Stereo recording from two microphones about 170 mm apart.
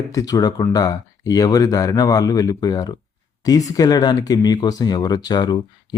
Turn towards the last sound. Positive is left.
turn(degrees=25)  # may be behind; listen again after turning